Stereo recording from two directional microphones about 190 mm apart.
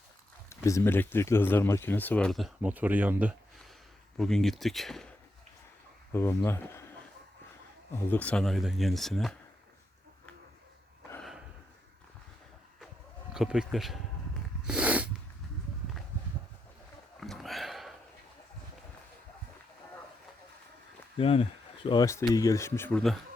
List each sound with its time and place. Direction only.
0.5 s speech: 15° left (ahead or behind); by 3.3 s 10° right (ahead or behind)
4.2 s speech: centre (ahead or behind)
6.1 s speech: 15° left (ahead or behind)
7.9 s speech: 10° left (ahead or behind)
11.1 s a sound: centre (ahead or behind)
13.3 s speech: 5° right (ahead or behind)
14.7 s snort: 5° right (ahead or behind)
17.2 s sniff: centre (ahead or behind)
21.2 s speech: 30° left (ahead or behind)
21.8 s speech: 20° left (ahead or behind)